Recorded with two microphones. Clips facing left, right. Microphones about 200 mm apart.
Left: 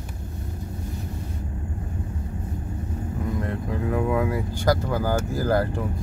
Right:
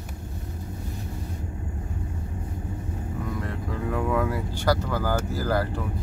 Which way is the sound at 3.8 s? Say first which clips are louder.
Left 2 dB; 20° left (ahead or behind).